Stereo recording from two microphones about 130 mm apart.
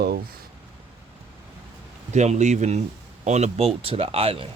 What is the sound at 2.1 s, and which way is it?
A man's voice, 60° right (ahead or behind).